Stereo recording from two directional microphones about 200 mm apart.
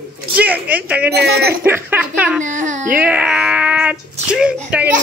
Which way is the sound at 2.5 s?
40° right (ahead or behind).